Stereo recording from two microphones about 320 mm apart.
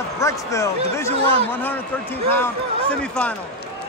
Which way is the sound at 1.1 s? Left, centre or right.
Centre.